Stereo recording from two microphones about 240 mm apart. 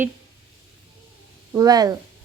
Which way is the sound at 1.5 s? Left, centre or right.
Centre.